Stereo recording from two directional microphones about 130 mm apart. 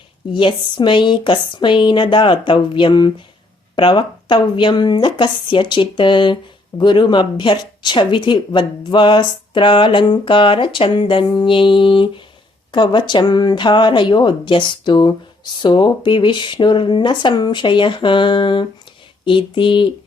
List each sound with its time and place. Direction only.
0.3 s speech: 40° left (ahead or behind)